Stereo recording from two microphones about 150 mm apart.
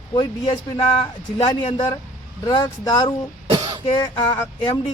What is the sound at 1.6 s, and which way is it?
A man's voice, 35° left (ahead or behind).